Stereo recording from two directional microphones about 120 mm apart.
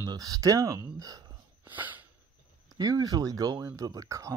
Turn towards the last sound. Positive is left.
turn(degrees=-25)  # may be behind; listen again after turning